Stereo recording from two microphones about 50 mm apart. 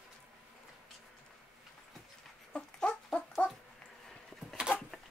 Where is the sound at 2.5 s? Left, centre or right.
Centre.